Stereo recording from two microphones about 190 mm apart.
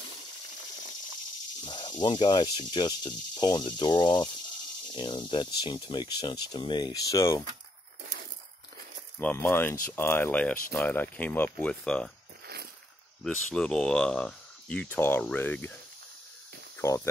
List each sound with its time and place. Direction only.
1.6 s speech: 25° left (ahead or behind)
9.2 s speech: 10° left (ahead or behind)
13.2 s speech: 5° left (ahead or behind)
16.7 s speech: 15° left (ahead or behind)